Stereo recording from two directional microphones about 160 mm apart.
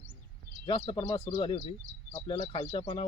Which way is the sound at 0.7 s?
35° left (ahead or behind).